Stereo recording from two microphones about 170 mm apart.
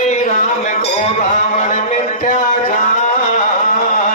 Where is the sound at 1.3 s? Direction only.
45° left (ahead or behind).